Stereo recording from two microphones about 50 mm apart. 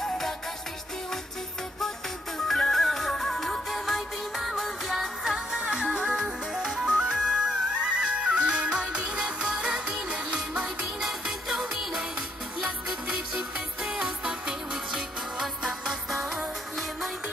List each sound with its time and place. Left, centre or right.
2.3 s music: centre
10.8 s music: centre
13.1 s music: centre